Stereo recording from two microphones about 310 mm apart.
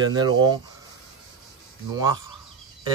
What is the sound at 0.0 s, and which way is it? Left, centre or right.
Speech, centre.